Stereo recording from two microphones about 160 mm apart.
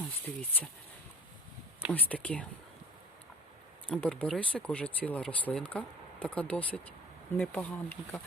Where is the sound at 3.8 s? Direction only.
10° left (ahead or behind).